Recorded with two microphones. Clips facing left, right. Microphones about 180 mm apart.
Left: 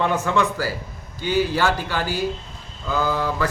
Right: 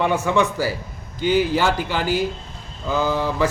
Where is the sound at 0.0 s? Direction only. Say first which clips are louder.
Right 2 dB; 15° right (ahead or behind).